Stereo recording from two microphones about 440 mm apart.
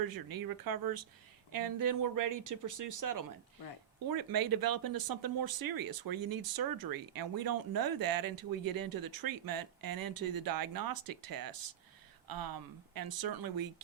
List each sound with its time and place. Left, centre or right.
0.1 s speech: right